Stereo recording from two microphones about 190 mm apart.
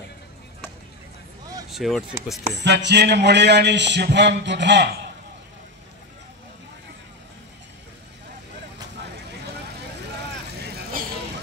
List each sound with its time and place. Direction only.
1.7 s speech: centre (ahead or behind)
2.6 s a man's voice: 65° right (ahead or behind)
10.7 s vehicle: 50° right (ahead or behind)